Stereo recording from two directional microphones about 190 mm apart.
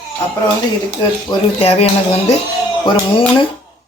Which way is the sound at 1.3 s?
25° left (ahead or behind).